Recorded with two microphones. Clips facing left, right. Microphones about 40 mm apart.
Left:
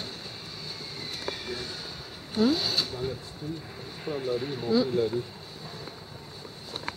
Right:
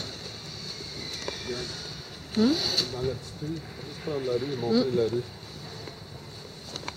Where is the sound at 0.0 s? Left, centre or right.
Centre.